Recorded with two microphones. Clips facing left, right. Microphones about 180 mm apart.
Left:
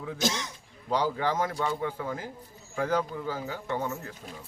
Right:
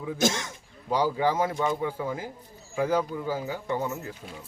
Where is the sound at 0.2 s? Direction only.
50° right (ahead or behind).